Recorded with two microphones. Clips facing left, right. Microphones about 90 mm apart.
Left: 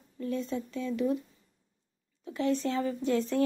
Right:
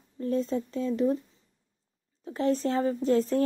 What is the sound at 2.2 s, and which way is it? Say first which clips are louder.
Speech: right 3 dB; 40° right (ahead or behind).